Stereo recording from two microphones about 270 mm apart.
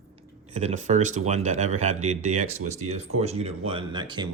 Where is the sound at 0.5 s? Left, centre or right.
Right.